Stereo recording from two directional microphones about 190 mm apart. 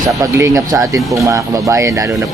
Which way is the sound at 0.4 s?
20° right (ahead or behind).